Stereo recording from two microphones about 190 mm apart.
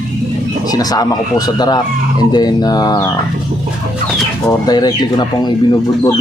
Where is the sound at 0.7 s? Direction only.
20° left (ahead or behind).